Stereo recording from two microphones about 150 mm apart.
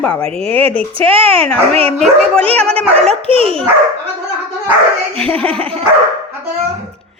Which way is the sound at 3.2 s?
40° right (ahead or behind).